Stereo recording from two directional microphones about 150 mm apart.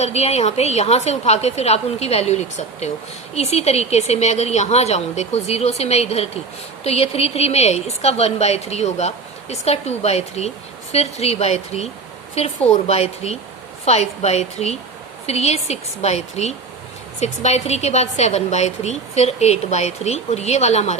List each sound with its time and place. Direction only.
0.0 s a woman's voice: 45° left (ahead or behind)